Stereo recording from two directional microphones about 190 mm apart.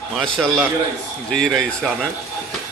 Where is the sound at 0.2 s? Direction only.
Centre (ahead or behind).